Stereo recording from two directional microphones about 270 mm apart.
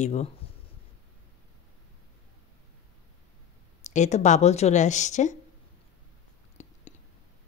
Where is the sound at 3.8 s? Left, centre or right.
Left.